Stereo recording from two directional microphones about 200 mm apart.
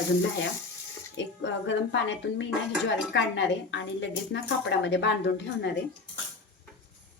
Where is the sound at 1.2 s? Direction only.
70° left (ahead or behind).